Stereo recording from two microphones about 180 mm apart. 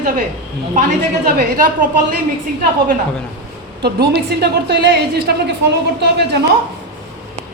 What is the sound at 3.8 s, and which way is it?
A woman's voice, 65° right (ahead or behind).